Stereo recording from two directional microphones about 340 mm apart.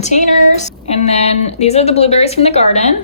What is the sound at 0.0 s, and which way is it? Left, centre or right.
Speech, left.